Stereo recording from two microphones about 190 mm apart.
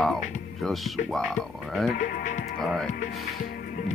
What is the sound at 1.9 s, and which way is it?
Music, 45° left (ahead or behind).